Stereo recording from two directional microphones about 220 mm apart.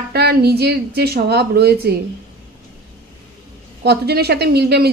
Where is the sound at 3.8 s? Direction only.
45° right (ahead or behind).